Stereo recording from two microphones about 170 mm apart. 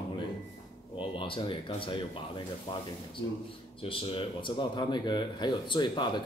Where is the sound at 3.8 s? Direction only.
30° left (ahead or behind).